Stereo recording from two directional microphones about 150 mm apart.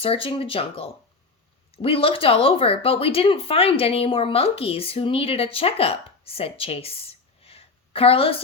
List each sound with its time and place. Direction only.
0.0 s speech: 40° left (ahead or behind)